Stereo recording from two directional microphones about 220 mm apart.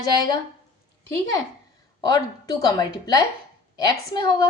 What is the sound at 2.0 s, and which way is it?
Speech, 15° left (ahead or behind).